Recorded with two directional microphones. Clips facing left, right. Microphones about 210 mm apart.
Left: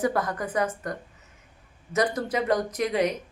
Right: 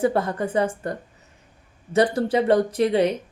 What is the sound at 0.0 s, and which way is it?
A woman's voice, 30° right (ahead or behind).